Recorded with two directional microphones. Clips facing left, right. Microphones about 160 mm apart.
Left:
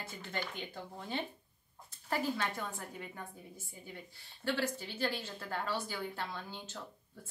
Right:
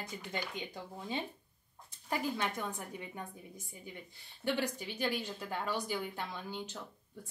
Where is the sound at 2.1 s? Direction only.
20° right (ahead or behind).